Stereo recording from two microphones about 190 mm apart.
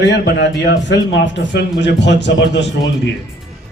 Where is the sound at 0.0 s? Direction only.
65° left (ahead or behind).